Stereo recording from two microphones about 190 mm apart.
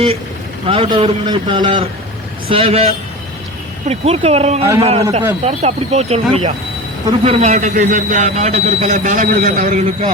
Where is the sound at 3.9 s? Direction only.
35° right (ahead or behind).